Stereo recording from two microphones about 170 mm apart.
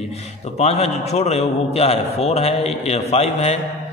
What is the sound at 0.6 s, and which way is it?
A man's voice, 40° left (ahead or behind).